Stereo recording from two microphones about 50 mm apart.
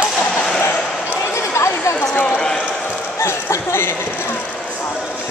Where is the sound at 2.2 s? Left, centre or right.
Centre.